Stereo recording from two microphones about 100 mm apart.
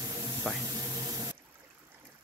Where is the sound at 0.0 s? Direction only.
40° right (ahead or behind).